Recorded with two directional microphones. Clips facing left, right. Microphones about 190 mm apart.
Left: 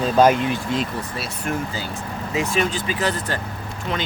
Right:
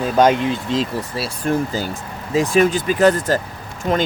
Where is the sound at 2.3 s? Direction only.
45° right (ahead or behind).